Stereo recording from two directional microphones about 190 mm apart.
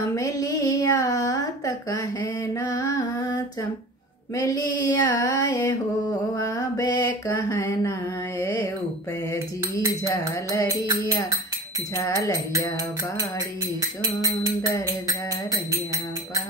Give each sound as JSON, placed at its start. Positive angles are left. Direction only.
{"t": 0.1, "sound": "a sound", "side_deg": 20}
{"t": 6.3, "sound": "mantra", "side_deg": 20}
{"t": 8.4, "sound": "music", "side_deg": 20}
{"t": 12.0, "sound": "music", "side_deg": 15}
{"t": 14.0, "sound": "music", "side_deg": -15}